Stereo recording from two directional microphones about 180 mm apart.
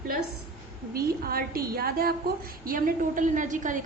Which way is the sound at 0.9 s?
55° right (ahead or behind).